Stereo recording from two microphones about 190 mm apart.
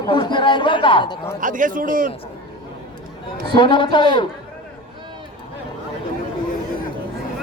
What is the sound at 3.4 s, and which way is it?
Speech, 25° left (ahead or behind).